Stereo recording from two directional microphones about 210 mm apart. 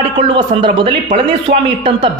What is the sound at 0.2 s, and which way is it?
A man's voice, 25° right (ahead or behind).